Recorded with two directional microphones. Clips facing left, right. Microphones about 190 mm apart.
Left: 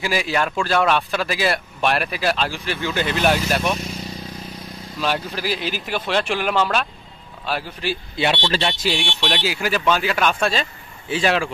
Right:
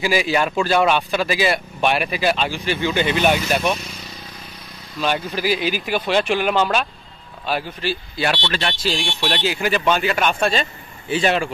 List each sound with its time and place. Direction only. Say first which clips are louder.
0.0 s speech: right 3 dB; centre (ahead or behind)
5.0 s speech: right 2 dB; centre (ahead or behind)
7.8 s speech: even; 15° left (ahead or behind)
8.8 s speech: even; 5° left (ahead or behind)